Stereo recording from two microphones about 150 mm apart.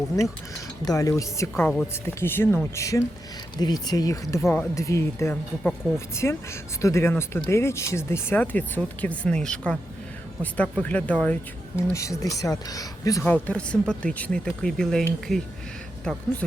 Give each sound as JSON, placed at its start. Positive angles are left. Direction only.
{"t": 0.2, "sound": "speech", "side_deg": 20}
{"t": 11.8, "sound": "speech", "side_deg": 20}
{"t": 13.2, "sound": "speech", "side_deg": 10}